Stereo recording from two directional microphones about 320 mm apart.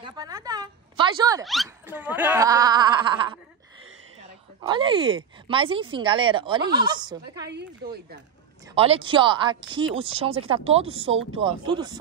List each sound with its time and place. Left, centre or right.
0.0 s a woman's voice: centre
1.4 s speech: centre
7.4 s speech: right
8.7 s speech: centre